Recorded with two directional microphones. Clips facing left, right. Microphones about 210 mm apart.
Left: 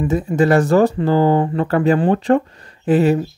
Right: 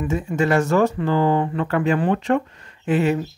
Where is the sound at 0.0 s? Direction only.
35° left (ahead or behind).